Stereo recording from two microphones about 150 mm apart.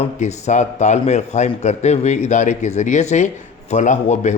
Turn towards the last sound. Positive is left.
turn(degrees=50)  # may be behind; listen again after turning